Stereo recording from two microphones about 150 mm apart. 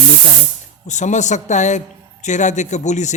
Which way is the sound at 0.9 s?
55° left (ahead or behind).